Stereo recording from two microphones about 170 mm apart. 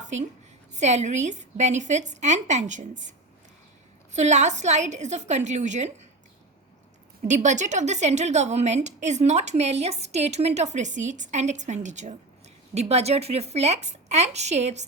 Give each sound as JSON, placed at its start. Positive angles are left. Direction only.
{"t": 0.0, "sound": "a sound", "side_deg": -45}
{"t": 0.7, "sound": "a woman's voice", "side_deg": -40}
{"t": 7.3, "sound": "a woman's voice", "side_deg": -45}